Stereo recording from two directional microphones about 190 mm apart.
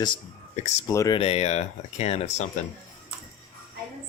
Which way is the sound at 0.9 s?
20° left (ahead or behind).